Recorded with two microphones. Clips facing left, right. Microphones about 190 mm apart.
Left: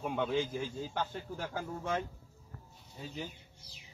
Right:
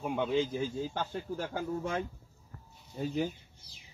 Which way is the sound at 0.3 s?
20° right (ahead or behind).